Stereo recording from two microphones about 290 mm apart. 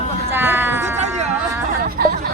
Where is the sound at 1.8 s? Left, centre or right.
Right.